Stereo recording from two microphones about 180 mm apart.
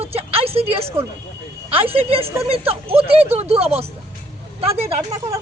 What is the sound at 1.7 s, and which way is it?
Speech, 30° right (ahead or behind).